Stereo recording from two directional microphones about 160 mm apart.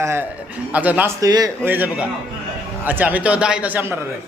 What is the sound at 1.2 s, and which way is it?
Speech, 25° right (ahead or behind).